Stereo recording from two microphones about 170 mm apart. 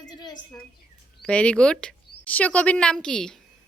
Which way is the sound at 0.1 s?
25° left (ahead or behind).